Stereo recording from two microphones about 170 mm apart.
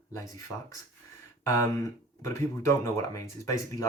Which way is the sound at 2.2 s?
15° left (ahead or behind).